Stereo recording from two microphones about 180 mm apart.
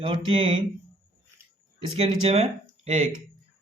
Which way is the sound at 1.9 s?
35° right (ahead or behind).